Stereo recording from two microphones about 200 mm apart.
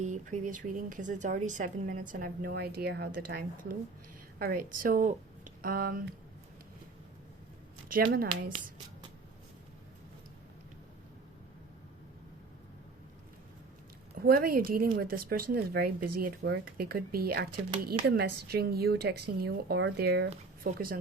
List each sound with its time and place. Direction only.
0.0 s speech: 40° right (ahead or behind)
7.9 s speech: 50° right (ahead or behind)
14.2 s speech: 50° right (ahead or behind)